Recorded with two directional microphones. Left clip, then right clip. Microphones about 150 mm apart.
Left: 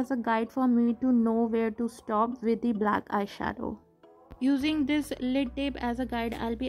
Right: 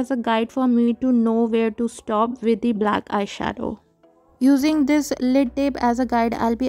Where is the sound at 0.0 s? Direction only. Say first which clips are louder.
Right 7 dB; 35° right (ahead or behind).